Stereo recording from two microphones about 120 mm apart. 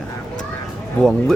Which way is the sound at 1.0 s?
5° left (ahead or behind).